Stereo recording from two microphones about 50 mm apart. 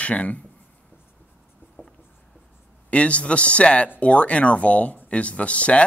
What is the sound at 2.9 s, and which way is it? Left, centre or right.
Speech, left.